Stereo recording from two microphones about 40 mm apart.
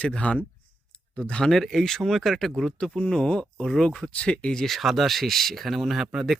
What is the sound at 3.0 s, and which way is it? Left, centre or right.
Speech, centre.